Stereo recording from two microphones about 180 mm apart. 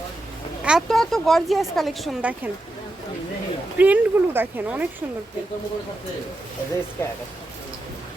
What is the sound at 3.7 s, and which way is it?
Speech, 10° right (ahead or behind).